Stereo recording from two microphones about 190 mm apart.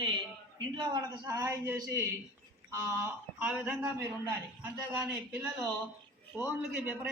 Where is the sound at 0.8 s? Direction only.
20° right (ahead or behind).